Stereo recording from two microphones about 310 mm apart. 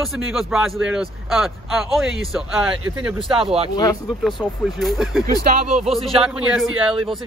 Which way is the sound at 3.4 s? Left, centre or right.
Centre.